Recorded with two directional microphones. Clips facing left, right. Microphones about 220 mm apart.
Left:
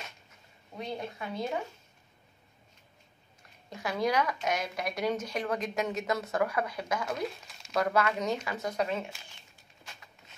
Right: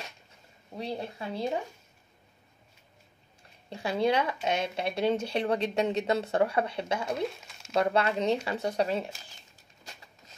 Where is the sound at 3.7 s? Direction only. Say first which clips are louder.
Right 3 dB; 30° right (ahead or behind).